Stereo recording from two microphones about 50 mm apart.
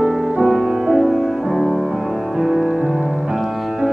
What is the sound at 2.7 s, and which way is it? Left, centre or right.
Music, right.